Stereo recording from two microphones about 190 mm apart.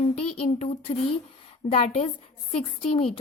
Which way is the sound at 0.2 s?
35° left (ahead or behind).